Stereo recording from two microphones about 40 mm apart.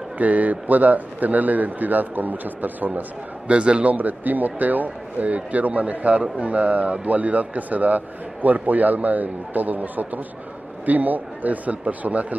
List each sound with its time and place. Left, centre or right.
0.2 s speech: right
3.4 s a man's voice: right
3.9 s a man's voice: right